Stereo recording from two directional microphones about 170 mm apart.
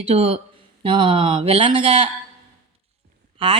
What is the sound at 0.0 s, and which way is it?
Speech, 35° right (ahead or behind).